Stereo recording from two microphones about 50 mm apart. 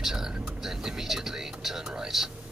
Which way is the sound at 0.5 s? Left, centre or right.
Centre.